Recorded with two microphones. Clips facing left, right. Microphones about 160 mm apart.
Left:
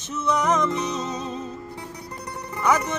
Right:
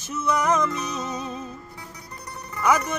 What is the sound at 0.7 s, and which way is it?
Music, 25° left (ahead or behind).